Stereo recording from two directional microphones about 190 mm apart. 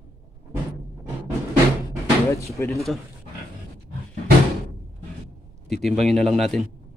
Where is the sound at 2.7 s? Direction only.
Centre (ahead or behind).